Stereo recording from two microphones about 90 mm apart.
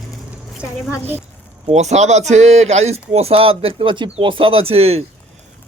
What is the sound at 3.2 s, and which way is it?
Speech, 90° right.